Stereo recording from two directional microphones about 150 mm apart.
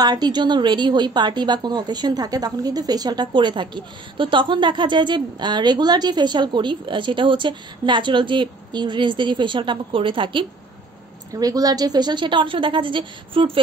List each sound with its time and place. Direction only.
0.0 s a woman's voice: 25° right (ahead or behind)